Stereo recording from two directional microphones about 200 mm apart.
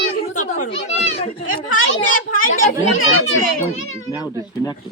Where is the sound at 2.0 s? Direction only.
40° left (ahead or behind).